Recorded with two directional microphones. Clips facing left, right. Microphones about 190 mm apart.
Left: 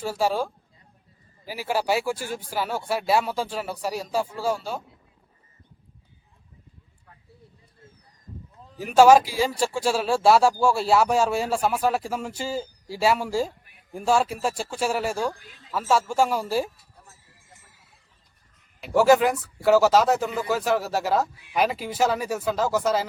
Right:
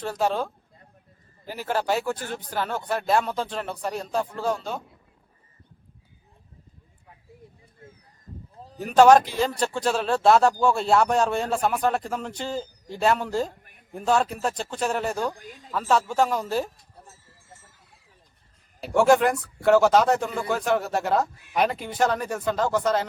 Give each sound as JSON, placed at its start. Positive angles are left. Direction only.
{"t": 0.0, "sound": "speech", "side_deg": 5}
{"t": 8.5, "sound": "a sound", "side_deg": -35}
{"t": 8.8, "sound": "speech", "side_deg": 5}
{"t": 18.9, "sound": "a man's voice", "side_deg": 5}